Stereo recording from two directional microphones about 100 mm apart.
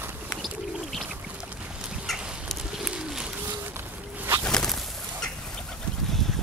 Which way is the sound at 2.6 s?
5° right (ahead or behind).